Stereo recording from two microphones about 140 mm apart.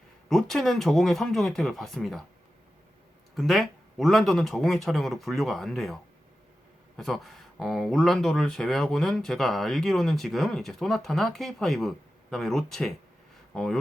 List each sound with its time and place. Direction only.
0.3 s speech: centre (ahead or behind)
3.3 s speech: centre (ahead or behind)